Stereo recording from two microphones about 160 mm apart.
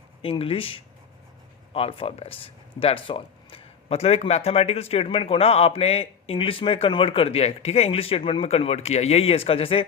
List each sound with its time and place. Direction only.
0.2 s speech: 35° left (ahead or behind)